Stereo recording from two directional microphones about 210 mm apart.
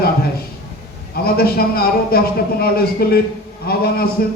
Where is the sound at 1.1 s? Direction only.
45° left (ahead or behind).